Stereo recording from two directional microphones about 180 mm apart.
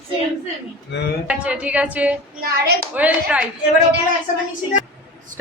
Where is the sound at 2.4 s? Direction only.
55° right (ahead or behind).